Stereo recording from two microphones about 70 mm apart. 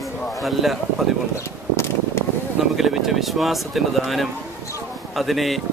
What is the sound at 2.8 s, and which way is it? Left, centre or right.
Speech, centre.